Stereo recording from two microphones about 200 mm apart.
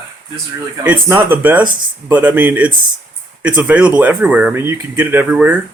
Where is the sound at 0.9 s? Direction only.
10° right (ahead or behind).